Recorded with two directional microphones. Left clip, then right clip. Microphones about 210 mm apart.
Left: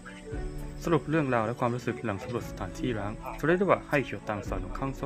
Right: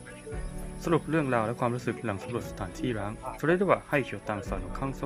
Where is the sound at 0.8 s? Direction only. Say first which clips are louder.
Even; centre (ahead or behind).